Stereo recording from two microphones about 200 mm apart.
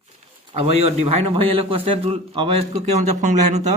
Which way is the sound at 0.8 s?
30° right (ahead or behind).